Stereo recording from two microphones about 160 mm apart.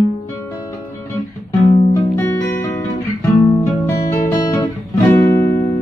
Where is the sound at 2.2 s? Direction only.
10° left (ahead or behind).